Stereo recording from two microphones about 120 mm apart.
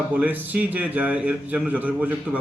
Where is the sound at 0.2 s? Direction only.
10° right (ahead or behind).